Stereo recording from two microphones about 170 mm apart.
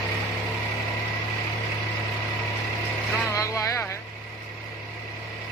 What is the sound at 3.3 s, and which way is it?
Music, 20° left (ahead or behind).